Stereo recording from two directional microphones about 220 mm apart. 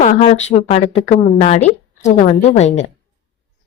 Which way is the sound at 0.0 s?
30° left (ahead or behind).